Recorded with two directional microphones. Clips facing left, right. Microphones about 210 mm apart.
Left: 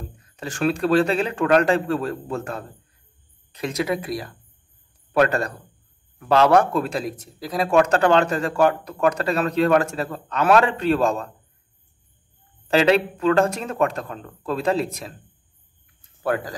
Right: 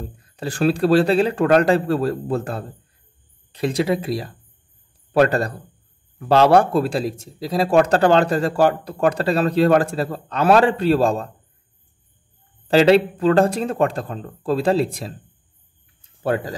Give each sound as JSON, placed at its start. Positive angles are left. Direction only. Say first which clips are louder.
{"t": 0.2, "sound": "speech", "louder": "right 3 dB", "side_deg": -35}
{"t": 12.6, "sound": "speech", "louder": "right 4 dB", "side_deg": -35}
{"t": 16.2, "sound": "speech", "louder": "right 2 dB", "side_deg": -25}